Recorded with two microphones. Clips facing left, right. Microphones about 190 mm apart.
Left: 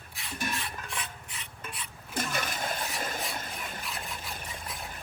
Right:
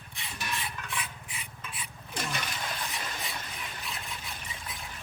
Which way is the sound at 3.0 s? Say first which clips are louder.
Left 4 dB; 45° left (ahead or behind).